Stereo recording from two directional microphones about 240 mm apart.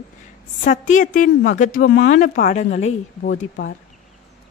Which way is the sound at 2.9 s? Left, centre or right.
Left.